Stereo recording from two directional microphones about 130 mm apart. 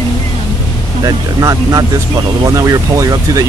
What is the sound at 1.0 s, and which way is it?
Speech, 25° right (ahead or behind).